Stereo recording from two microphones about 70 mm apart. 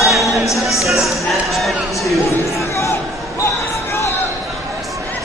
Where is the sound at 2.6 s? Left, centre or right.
Left.